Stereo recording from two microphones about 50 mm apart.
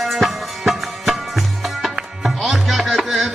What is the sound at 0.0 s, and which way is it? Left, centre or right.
Music, centre.